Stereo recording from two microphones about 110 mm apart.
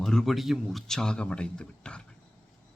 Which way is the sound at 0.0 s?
5° left (ahead or behind).